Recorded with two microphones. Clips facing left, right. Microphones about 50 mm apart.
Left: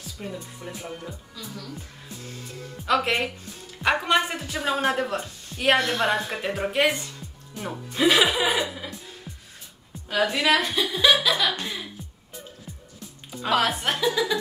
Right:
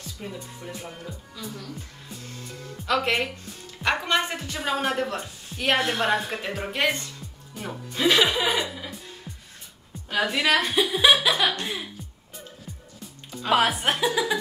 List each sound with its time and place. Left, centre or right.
0.0 s speech: centre
7.5 s music: centre
10.0 s speech: centre
10.7 s speech: centre
11.2 s a sound: centre
11.6 s speech: centre
13.0 s music: centre
13.5 s speech: centre